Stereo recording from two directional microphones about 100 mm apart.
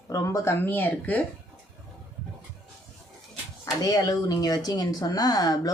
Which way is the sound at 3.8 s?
35° left (ahead or behind).